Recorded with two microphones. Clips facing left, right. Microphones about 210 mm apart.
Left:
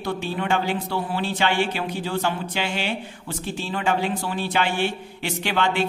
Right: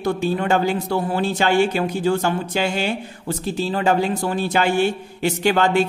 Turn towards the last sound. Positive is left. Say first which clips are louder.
# right 6 dB
turn(degrees=-45)  # may be behind; listen again after turning